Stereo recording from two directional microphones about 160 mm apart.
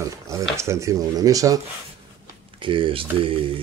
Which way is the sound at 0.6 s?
20° right (ahead or behind).